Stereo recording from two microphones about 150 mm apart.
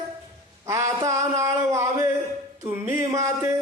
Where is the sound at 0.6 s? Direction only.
20° right (ahead or behind).